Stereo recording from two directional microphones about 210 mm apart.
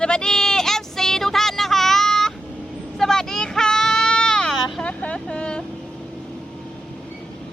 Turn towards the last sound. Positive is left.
turn(degrees=5)  # may be behind; listen again after turning